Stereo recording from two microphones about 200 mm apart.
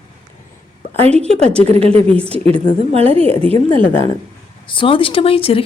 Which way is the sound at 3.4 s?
30° right (ahead or behind).